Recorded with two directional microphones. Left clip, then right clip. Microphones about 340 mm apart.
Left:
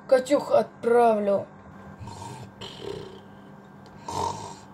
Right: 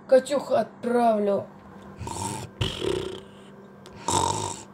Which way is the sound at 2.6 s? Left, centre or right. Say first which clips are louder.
Right 9 dB; right.